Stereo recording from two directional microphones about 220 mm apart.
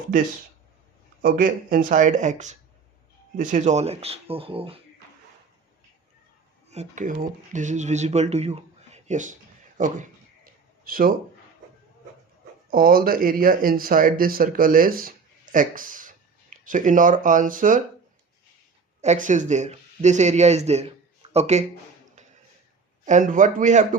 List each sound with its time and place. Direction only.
1.2 s speech: 40° right (ahead or behind)
6.7 s speech: 30° right (ahead or behind)
9.7 s a sound: 35° right (ahead or behind)
12.7 s speech: 40° right (ahead or behind)
19.0 s speech: 35° right (ahead or behind)
23.0 s speech: 35° right (ahead or behind)